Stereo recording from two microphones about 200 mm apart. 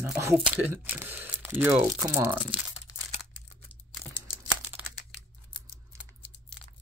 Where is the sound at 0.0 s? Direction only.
15° right (ahead or behind).